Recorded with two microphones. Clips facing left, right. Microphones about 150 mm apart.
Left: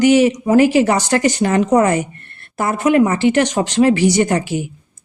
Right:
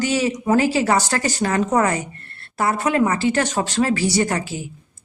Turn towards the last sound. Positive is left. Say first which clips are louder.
# left 5 dB
turn(degrees=20)  # may be behind; listen again after turning